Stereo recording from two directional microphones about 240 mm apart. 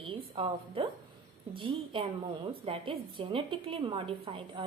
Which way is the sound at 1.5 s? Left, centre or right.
Right.